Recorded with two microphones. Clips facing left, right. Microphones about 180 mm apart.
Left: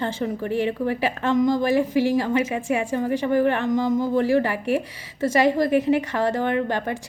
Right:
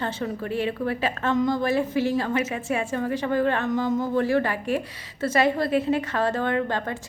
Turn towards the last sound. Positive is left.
turn(degrees=15)  # may be behind; listen again after turning